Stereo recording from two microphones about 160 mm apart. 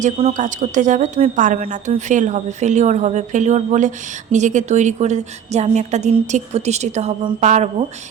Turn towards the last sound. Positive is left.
turn(degrees=-45)  # may be behind; listen again after turning